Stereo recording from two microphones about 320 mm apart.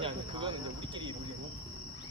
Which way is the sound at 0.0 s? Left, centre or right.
Centre.